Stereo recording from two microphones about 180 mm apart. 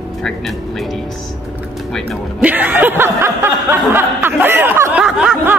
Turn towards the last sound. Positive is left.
turn(degrees=-5)  # may be behind; listen again after turning